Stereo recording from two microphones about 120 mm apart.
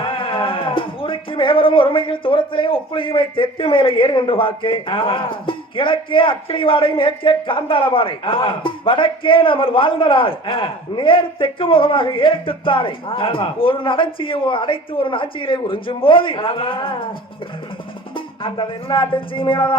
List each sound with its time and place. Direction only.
0.0 s speech: 45° left (ahead or behind)
18.1 s music: 45° left (ahead or behind)